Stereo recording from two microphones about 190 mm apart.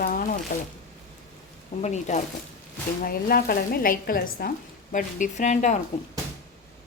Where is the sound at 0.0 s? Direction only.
50° left (ahead or behind).